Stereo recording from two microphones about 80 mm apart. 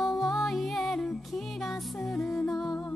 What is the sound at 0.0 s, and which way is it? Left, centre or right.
Music, centre.